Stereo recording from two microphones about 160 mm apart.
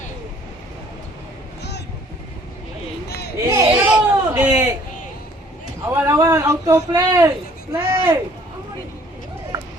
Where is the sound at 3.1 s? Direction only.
90° left.